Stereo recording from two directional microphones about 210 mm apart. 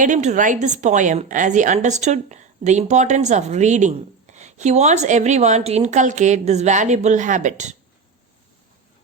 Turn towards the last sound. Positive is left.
turn(degrees=-35)  # may be behind; listen again after turning